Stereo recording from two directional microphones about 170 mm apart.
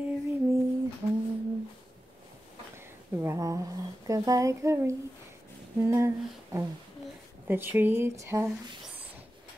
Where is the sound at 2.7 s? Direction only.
15° right (ahead or behind).